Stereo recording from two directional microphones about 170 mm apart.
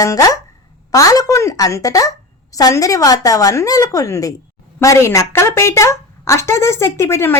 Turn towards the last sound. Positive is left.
turn(degrees=15)  # may be behind; listen again after turning